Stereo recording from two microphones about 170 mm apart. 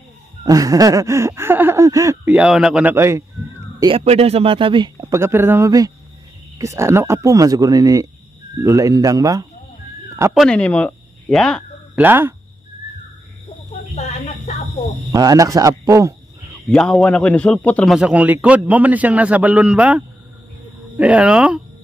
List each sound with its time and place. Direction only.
0.4 s a sound: 20° right (ahead or behind)
2.3 s a man's voice: 5° right (ahead or behind)
3.8 s speech: 35° right (ahead or behind)
5.1 s a man's voice: 15° right (ahead or behind)
6.6 s a sound: 15° right (ahead or behind)
10.3 s speech: 5° left (ahead or behind)
12.0 s a man's voice: 15° right (ahead or behind)
13.7 s a sound: 40° left (ahead or behind)
15.0 s a man's voice: 20° right (ahead or behind)
16.6 s a man's voice: 5° left (ahead or behind)
17.9 s a man's voice: 10° right (ahead or behind)
21.0 s a man's voice: 5° right (ahead or behind)